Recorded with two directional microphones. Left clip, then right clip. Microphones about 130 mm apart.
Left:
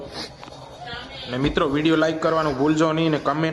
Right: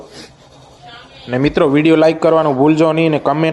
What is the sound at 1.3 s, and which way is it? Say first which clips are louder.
A man's voice: right 9 dB; 45° right (ahead or behind).